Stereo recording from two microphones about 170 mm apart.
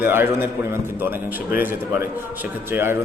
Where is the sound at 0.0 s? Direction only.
15° right (ahead or behind).